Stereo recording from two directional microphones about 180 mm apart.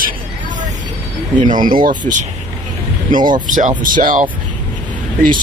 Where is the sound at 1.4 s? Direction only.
45° right (ahead or behind).